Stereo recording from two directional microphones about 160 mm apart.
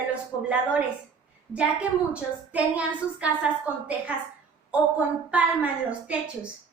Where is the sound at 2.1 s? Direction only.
10° right (ahead or behind).